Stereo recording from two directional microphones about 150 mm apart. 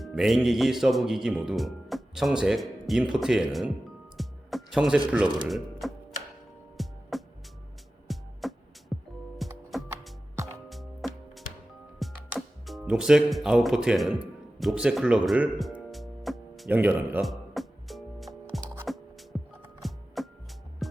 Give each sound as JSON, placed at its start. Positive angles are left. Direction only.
{"t": 0.0, "sound": "speech", "side_deg": 0}
{"t": 4.2, "sound": "music", "side_deg": 0}
{"t": 5.1, "sound": "speech", "side_deg": -5}
{"t": 6.8, "sound": "music", "side_deg": 0}
{"t": 8.0, "sound": "music", "side_deg": 0}
{"t": 12.6, "sound": "speech", "side_deg": -5}
{"t": 16.7, "sound": "speech", "side_deg": -10}
{"t": 17.2, "sound": "music", "side_deg": 0}